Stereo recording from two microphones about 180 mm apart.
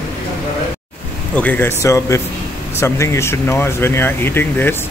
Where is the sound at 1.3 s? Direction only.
10° left (ahead or behind).